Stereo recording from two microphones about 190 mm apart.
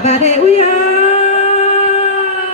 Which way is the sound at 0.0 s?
35° left (ahead or behind).